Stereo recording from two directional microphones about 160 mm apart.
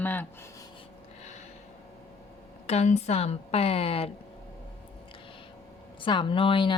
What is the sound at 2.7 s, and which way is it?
A woman's voice, 45° left (ahead or behind).